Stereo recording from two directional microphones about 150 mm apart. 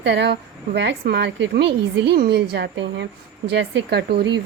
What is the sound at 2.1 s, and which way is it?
A woman's voice, 90° right.